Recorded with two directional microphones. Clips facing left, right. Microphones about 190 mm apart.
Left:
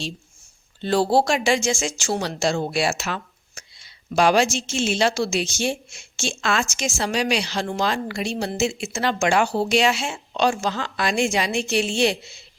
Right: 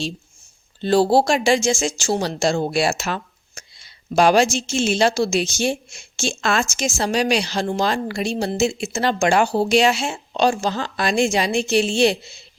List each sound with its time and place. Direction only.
0.8 s speech: 35° right (ahead or behind)